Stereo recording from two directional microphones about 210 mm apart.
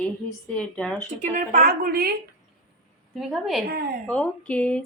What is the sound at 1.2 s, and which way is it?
Speech, 40° right (ahead or behind).